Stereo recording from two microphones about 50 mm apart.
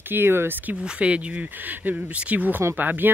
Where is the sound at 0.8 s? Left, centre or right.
Right.